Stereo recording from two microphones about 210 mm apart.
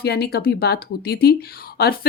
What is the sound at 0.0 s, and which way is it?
Speech, 50° left (ahead or behind).